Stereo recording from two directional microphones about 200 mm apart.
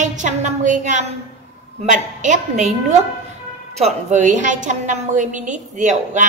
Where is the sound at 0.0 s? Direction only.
40° right (ahead or behind).